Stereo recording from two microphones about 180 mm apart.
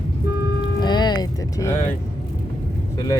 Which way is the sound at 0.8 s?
25° left (ahead or behind).